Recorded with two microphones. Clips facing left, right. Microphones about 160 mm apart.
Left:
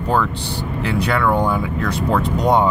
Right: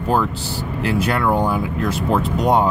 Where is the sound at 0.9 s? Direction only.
Centre (ahead or behind).